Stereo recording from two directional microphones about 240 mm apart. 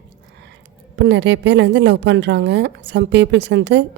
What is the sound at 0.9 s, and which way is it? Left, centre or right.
A woman's voice, right.